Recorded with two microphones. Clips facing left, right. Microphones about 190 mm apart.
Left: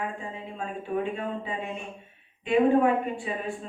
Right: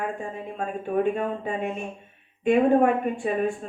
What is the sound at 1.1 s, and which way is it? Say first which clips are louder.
Speech: right 4 dB; 50° right (ahead or behind).